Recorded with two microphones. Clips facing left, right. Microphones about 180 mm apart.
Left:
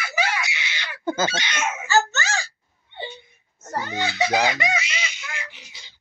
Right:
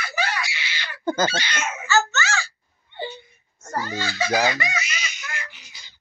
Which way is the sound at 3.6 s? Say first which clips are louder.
Left 1 dB; 20° left (ahead or behind).